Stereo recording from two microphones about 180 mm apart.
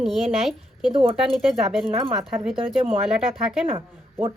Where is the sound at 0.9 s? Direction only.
30° right (ahead or behind).